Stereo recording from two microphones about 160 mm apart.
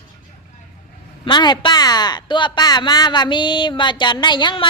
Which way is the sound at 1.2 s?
30° left (ahead or behind).